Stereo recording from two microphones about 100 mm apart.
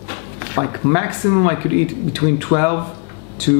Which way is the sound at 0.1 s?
20° left (ahead or behind).